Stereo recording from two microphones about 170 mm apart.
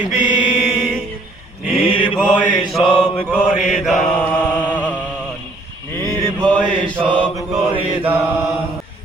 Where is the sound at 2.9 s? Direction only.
25° left (ahead or behind).